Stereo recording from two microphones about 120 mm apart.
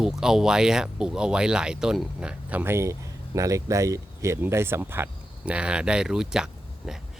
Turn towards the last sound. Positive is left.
turn(degrees=-5)  # may be behind; listen again after turning